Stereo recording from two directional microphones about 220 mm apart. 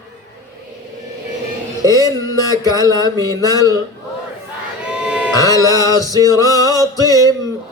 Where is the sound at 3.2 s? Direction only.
15° right (ahead or behind).